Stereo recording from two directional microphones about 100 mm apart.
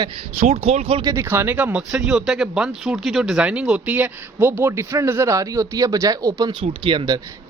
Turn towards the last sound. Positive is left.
turn(degrees=-60)  # may be behind; listen again after turning